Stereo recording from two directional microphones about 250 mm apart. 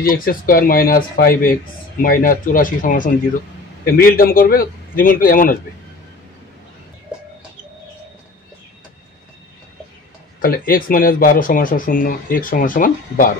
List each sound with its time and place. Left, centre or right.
0.0 s speech: left
10.4 s speech: left